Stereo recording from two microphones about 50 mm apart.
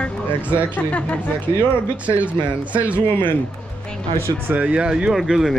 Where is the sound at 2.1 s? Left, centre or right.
Right.